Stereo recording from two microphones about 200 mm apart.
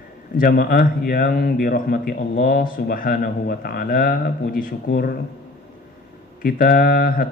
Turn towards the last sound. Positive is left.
turn(degrees=45)  # may be behind; listen again after turning